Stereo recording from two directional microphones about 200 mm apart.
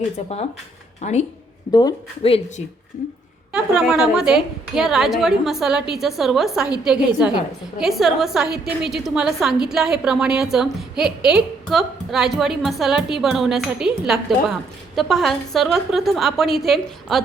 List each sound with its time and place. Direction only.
0.2 s speech: 35° left (ahead or behind)
3.5 s a woman's voice: 5° right (ahead or behind)